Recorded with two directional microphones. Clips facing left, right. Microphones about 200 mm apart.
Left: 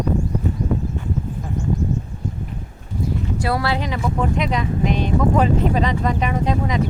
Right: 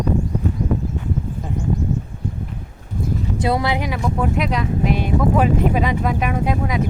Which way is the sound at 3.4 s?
20° right (ahead or behind).